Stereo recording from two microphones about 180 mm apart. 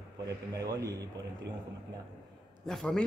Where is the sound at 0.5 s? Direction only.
20° right (ahead or behind).